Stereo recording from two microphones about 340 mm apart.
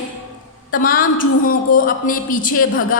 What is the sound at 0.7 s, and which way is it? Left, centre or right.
A woman's voice, left.